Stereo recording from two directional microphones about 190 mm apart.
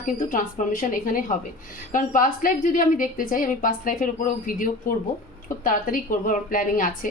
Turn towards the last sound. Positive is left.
turn(degrees=45)  # may be behind; listen again after turning